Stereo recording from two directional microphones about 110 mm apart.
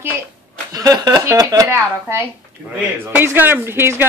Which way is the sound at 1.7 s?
20° right (ahead or behind).